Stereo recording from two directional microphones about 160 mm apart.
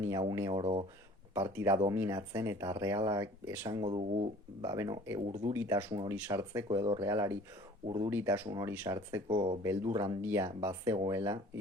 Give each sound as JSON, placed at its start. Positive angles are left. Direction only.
{"t": 0.0, "sound": "speech", "side_deg": -25}
{"t": 0.6, "sound": "speech", "side_deg": -35}
{"t": 1.3, "sound": "speech", "side_deg": -15}
{"t": 3.8, "sound": "speech", "side_deg": -40}
{"t": 4.6, "sound": "speech", "side_deg": -20}
{"t": 8.1, "sound": "speech", "side_deg": -15}
{"t": 9.3, "sound": "speech", "side_deg": -30}